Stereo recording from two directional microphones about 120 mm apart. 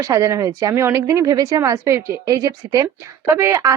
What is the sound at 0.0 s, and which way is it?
A woman's voice, 25° right (ahead or behind).